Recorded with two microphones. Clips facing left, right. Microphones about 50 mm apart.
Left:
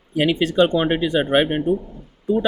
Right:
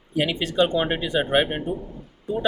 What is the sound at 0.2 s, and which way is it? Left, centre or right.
Speech, left.